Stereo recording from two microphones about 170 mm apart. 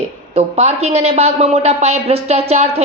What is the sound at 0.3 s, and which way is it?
A woman's voice, 40° right (ahead or behind).